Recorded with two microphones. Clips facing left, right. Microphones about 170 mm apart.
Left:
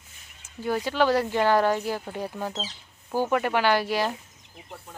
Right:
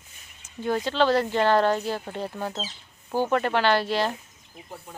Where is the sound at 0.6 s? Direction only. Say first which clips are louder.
Right 1 dB; 10° left (ahead or behind).